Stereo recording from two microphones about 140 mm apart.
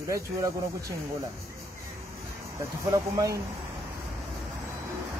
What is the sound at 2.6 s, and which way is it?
Speech, 25° right (ahead or behind).